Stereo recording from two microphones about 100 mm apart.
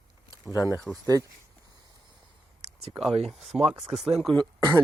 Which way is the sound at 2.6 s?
75° right (ahead or behind).